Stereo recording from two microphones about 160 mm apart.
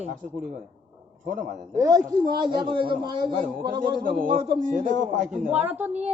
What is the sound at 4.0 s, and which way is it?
A man's voice, 60° right (ahead or behind).